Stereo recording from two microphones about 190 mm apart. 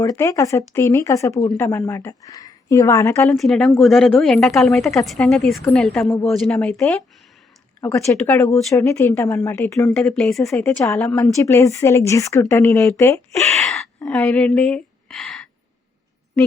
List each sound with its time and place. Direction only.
0.0 s speech: 15° left (ahead or behind)
3.2 s a woman's voice: centre (ahead or behind)
7.8 s speech: 15° left (ahead or behind)
9.9 s a woman's voice: centre (ahead or behind)
10.6 s speech: 10° left (ahead or behind)
13.6 s a sound: centre (ahead or behind)
14.1 s a woman's voice: 5° left (ahead or behind)